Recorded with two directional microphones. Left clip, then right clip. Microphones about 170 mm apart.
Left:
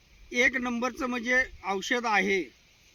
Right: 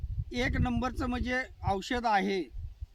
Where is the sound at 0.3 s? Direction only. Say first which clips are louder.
Left 7 dB; 15° right (ahead or behind).